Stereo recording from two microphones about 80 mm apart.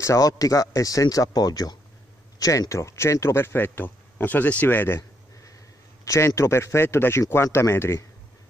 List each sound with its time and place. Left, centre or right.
0.0 s speech: left
6.0 s speech: left